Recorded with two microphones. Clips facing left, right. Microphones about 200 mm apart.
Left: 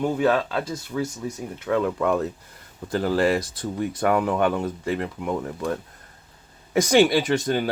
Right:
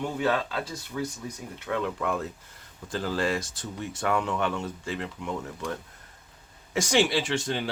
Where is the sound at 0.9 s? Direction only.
55° left (ahead or behind).